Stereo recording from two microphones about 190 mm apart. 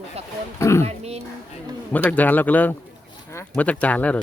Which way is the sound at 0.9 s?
35° right (ahead or behind).